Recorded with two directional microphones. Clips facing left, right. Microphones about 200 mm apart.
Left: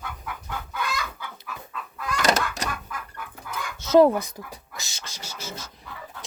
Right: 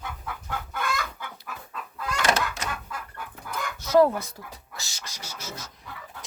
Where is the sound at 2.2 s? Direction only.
40° left (ahead or behind).